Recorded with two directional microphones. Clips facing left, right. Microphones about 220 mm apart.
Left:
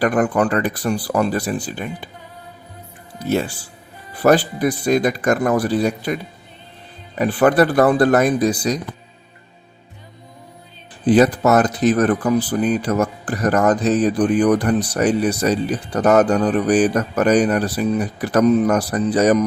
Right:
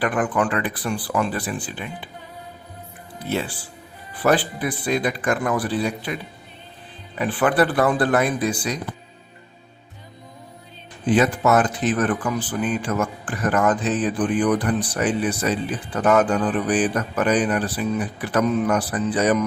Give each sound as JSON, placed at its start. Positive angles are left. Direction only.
{"t": 0.0, "sound": "speech", "side_deg": 40}
{"t": 3.2, "sound": "speech", "side_deg": 45}
{"t": 7.2, "sound": "speech", "side_deg": 40}
{"t": 11.0, "sound": "speech", "side_deg": 35}